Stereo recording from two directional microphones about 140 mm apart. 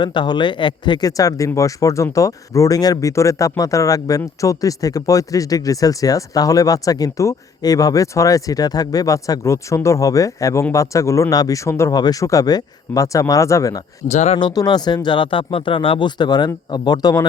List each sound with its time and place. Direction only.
0.0 s speech: 35° left (ahead or behind)
14.1 s speech: 55° left (ahead or behind)
14.3 s speech: 30° left (ahead or behind)